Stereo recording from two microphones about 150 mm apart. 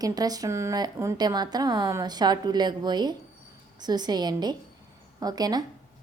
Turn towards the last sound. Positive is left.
turn(degrees=-25)  # may be behind; listen again after turning